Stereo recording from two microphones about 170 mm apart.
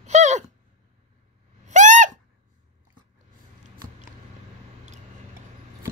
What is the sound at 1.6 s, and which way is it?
Gasp, 45° right (ahead or behind).